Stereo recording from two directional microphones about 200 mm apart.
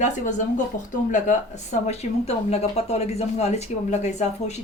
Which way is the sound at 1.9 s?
30° left (ahead or behind).